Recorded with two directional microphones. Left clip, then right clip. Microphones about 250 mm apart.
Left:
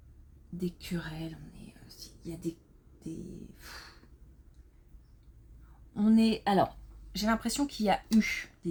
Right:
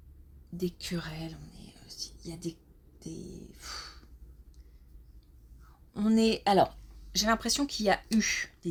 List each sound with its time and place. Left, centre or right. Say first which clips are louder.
0.5 s speech: right 3 dB; right
3.6 s a sound: right 8 dB; right
5.9 s speech: right 1 dB; right